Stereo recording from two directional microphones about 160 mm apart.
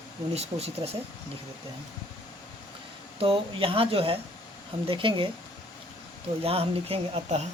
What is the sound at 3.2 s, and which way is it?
Speech, 35° right (ahead or behind).